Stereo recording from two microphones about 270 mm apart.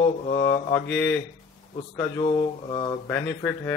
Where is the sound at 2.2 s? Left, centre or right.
Centre.